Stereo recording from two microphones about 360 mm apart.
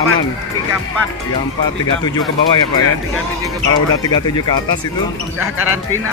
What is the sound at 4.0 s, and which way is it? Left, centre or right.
Speech, centre.